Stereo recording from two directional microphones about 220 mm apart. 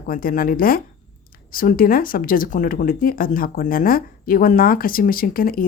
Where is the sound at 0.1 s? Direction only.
40° left (ahead or behind).